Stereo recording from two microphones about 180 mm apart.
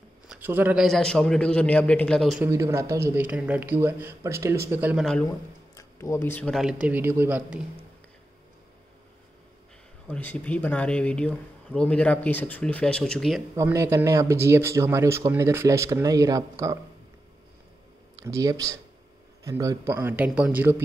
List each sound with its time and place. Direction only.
0.3 s a man's voice: 10° right (ahead or behind)
0.8 s a man's voice: 5° left (ahead or behind)
2.4 s speech: 15° right (ahead or behind)
5.8 s speech: 15° left (ahead or behind)
6.6 s speech: 5° right (ahead or behind)
10.0 s speech: 10° left (ahead or behind)
13.6 s speech: 15° right (ahead or behind)
18.2 s speech: 15° right (ahead or behind)